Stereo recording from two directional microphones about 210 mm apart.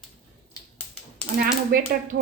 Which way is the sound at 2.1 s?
45° right (ahead or behind).